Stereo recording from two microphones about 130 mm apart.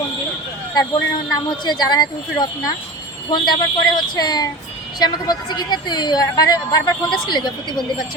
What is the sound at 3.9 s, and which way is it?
A woman's voice, 30° left (ahead or behind).